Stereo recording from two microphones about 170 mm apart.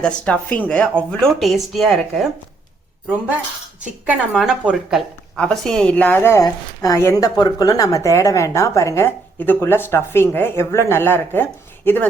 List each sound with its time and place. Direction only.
0.0 s speech: 5° left (ahead or behind)
3.8 s speech: 5° right (ahead or behind); by 11.4 s 10° left (ahead or behind)